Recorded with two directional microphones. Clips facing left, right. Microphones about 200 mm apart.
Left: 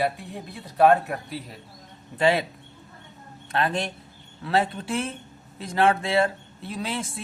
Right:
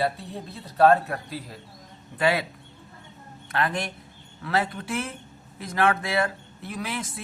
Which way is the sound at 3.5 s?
25° left (ahead or behind).